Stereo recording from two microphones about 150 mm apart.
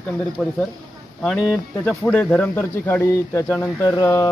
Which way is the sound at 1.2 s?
Centre (ahead or behind).